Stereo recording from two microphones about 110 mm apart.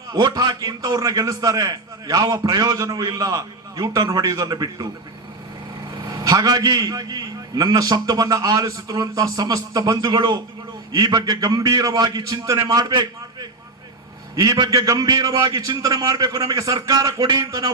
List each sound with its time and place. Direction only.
0.1 s a man's voice: 40° right (ahead or behind)
6.1 s a man's voice: 35° right (ahead or behind)